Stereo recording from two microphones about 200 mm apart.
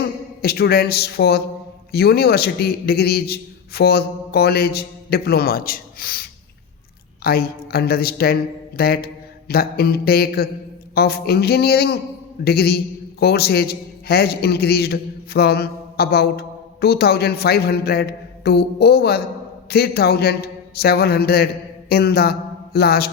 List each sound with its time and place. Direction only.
0.4 s a man's voice: 50° left (ahead or behind)
7.3 s a man's voice: 50° left (ahead or behind)